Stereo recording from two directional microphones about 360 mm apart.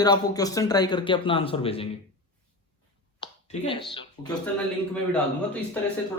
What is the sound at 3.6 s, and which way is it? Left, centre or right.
Speech, centre.